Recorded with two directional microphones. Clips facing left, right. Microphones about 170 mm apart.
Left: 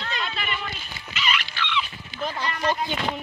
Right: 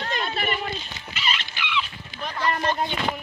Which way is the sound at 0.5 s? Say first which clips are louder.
Right 4 dB; 30° right (ahead or behind).